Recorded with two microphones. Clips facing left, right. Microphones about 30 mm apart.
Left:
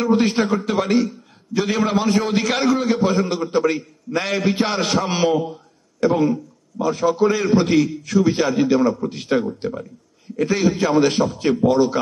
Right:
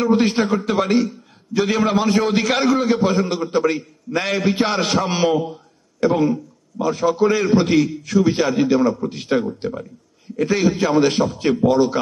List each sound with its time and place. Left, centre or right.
0.0 s a man's voice: centre
6.0 s a man's voice: centre